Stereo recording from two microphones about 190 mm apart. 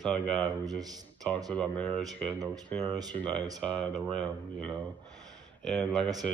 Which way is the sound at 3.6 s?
5° left (ahead or behind).